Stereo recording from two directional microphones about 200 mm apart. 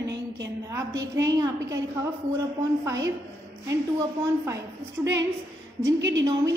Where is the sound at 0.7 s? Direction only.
15° right (ahead or behind).